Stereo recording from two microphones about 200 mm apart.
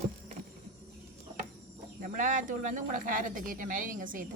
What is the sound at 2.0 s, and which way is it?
Speech, 45° right (ahead or behind).